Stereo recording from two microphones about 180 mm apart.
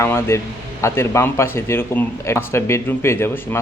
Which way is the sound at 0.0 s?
15° left (ahead or behind).